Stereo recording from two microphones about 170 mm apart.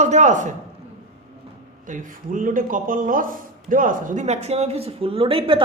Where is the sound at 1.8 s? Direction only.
50° right (ahead or behind).